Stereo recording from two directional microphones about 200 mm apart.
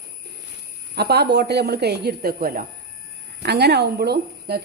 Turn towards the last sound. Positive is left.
turn(degrees=-55)  # may be behind; listen again after turning